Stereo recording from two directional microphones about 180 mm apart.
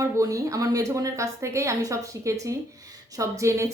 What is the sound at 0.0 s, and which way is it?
A woman's voice, 20° right (ahead or behind).